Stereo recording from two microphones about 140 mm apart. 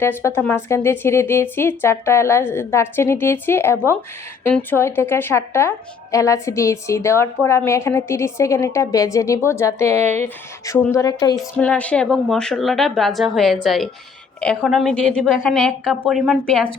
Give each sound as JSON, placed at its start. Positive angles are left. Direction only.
{"t": 0.0, "sound": "speech", "side_deg": 20}
{"t": 11.5, "sound": "speech", "side_deg": 10}